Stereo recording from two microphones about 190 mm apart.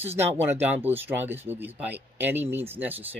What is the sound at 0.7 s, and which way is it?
Speech, 10° right (ahead or behind).